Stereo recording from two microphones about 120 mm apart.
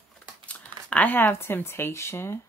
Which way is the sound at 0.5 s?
10° left (ahead or behind).